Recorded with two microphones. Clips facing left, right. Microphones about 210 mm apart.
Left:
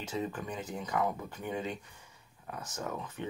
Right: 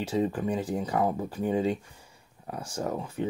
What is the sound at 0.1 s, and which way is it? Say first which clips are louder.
Speech: right 8 dB; 30° right (ahead or behind).